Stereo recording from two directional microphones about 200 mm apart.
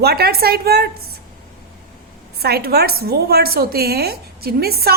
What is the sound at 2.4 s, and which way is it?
A woman's voice, 50° right (ahead or behind).